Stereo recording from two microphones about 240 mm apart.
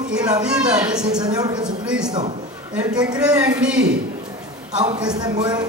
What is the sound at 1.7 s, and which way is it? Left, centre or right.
Speech, centre.